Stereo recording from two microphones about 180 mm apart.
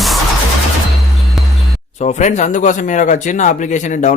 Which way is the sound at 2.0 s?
40° left (ahead or behind).